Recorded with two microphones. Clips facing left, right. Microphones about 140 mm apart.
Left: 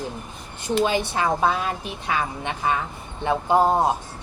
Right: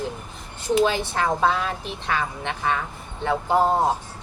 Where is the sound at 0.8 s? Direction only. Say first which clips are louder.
Even; 15° left (ahead or behind).